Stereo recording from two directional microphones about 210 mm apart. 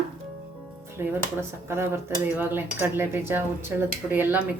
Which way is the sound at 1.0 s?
10° right (ahead or behind).